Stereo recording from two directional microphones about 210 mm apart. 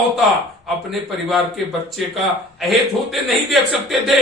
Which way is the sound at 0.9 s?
Centre (ahead or behind).